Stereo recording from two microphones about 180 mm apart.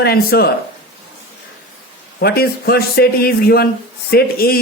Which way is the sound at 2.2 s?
60° left (ahead or behind).